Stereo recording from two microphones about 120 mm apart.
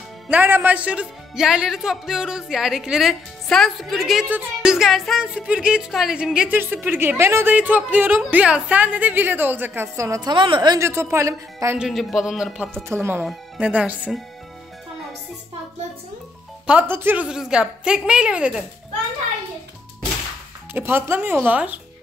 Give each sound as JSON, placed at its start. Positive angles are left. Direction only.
{"t": 0.3, "sound": "speech", "side_deg": -15}
{"t": 6.6, "sound": "a woman's voice", "side_deg": -15}
{"t": 10.3, "sound": "speech", "side_deg": -40}
{"t": 10.8, "sound": "speech", "side_deg": -20}
{"t": 11.8, "sound": "speech", "side_deg": 0}
{"t": 12.8, "sound": "speech", "side_deg": -20}
{"t": 13.2, "sound": "a woman's voice", "side_deg": -10}
{"t": 16.6, "sound": "a woman's voice", "side_deg": -15}
{"t": 20.7, "sound": "a woman's voice", "side_deg": -20}